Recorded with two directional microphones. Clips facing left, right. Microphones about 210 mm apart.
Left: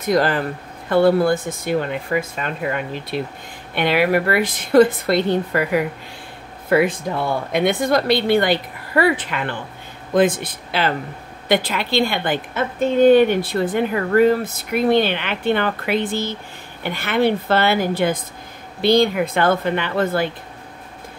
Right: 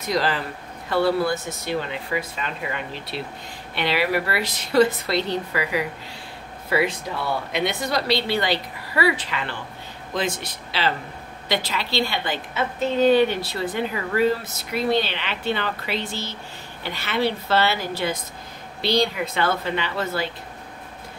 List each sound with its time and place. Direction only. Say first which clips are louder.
0.0 s a woman's voice: left 6 dB; 50° left (ahead or behind)